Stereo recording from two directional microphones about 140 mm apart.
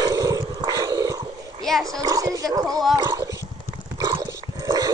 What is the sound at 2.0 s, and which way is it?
Dog, 25° right (ahead or behind).